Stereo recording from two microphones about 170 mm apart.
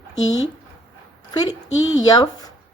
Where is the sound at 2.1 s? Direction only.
20° left (ahead or behind).